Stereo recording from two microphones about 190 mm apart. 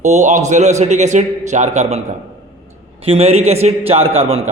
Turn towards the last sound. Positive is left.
turn(degrees=-30)  # may be behind; listen again after turning